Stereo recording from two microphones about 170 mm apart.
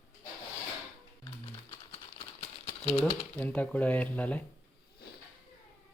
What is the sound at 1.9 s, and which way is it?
Typewriter, 35° left (ahead or behind).